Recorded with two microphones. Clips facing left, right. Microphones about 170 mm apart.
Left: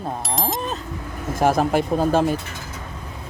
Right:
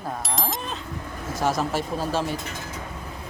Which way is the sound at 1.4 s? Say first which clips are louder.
Left 6 dB; 55° left (ahead or behind).